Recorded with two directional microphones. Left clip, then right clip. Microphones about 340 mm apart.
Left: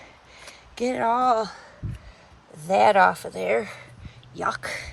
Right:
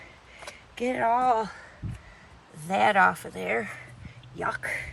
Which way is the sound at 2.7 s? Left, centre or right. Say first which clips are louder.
Left 4 dB; centre.